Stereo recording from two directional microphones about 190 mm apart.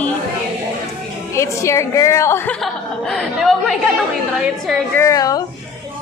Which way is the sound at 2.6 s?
Centre (ahead or behind).